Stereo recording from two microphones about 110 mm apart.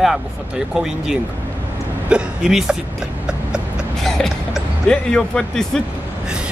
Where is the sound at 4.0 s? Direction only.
5° left (ahead or behind).